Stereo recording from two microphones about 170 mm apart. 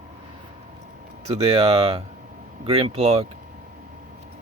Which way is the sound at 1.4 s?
35° right (ahead or behind).